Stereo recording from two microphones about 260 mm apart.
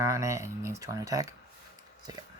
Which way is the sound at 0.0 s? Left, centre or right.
Centre.